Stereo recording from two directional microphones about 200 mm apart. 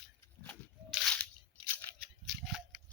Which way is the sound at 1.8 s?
Centre (ahead or behind).